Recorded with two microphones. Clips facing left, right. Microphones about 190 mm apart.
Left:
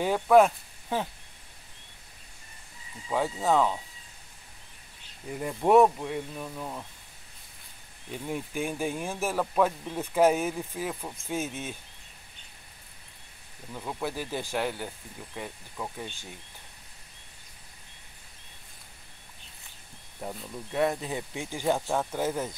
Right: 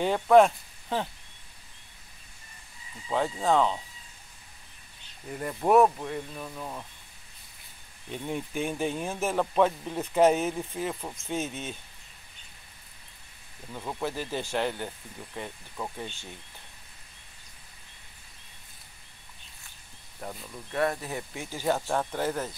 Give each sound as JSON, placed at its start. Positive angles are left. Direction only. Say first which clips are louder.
{"t": 0.0, "sound": "speech", "louder": "right 1 dB", "side_deg": 5}
{"t": 3.1, "sound": "speech", "louder": "even", "side_deg": 5}
{"t": 5.3, "sound": "speech", "louder": "left 1 dB", "side_deg": 10}
{"t": 8.1, "sound": "speech", "louder": "right 1 dB", "side_deg": 5}
{"t": 13.7, "sound": "speech", "louder": "right 1 dB", "side_deg": 0}
{"t": 14.1, "sound": "speech", "louder": "right 1 dB", "side_deg": 10}
{"t": 20.2, "sound": "speech", "louder": "left 2 dB", "side_deg": 20}